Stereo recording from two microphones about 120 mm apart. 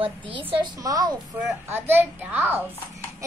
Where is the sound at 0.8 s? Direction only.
30° right (ahead or behind).